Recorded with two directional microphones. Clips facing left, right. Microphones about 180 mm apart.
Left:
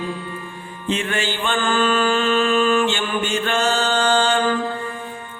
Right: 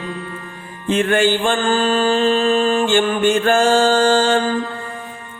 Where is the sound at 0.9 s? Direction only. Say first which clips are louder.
Right 8 dB; 50° right (ahead or behind); by 2.9 s 35° right (ahead or behind).